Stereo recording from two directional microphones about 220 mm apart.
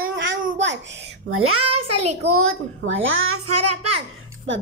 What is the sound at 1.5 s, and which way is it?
Speech, 25° right (ahead or behind).